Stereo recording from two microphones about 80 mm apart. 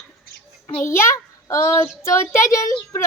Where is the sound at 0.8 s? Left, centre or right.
Left.